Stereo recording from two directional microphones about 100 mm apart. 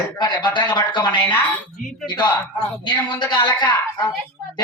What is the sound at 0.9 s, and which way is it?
Speech, 20° left (ahead or behind).